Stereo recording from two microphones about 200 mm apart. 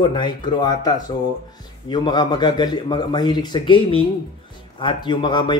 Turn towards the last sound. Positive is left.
turn(degrees=20)  # may be behind; listen again after turning